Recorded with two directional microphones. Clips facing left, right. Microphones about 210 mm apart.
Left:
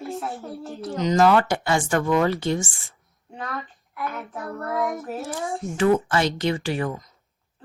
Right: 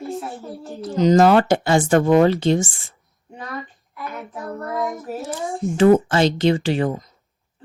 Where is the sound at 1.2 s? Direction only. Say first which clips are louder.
Right 2 dB; 25° right (ahead or behind).